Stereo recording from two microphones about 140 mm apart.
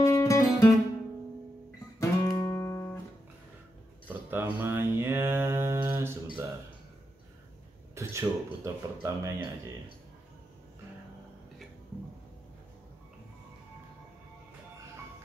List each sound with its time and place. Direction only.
0.0 s music: 25° left (ahead or behind)
2.0 s music: 25° left (ahead or behind)
4.1 s mantra: 15° right (ahead or behind)
7.9 s speech: 20° right (ahead or behind)